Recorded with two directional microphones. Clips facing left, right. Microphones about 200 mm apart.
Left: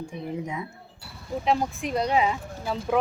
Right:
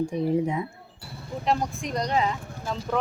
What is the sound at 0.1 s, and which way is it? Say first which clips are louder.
Speech: right 9 dB; 35° right (ahead or behind).